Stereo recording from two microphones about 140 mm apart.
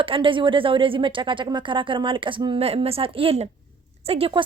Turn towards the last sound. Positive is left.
turn(degrees=-40)  # may be behind; listen again after turning